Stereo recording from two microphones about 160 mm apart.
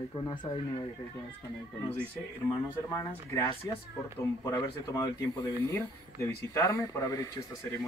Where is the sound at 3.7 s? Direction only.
20° left (ahead or behind).